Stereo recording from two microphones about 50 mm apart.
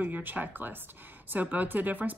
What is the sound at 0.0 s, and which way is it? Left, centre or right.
Speech, right.